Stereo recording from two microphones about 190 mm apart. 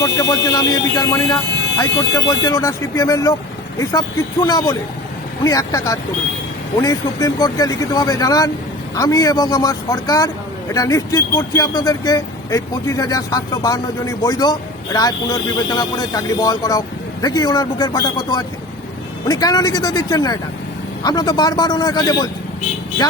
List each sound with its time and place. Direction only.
0.2 s speech: 20° left (ahead or behind)